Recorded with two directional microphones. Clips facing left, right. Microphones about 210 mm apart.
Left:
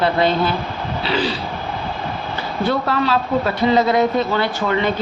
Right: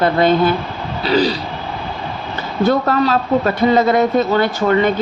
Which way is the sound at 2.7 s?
45° right (ahead or behind).